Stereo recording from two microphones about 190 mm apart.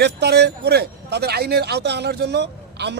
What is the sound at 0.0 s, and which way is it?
Speech, 60° right (ahead or behind).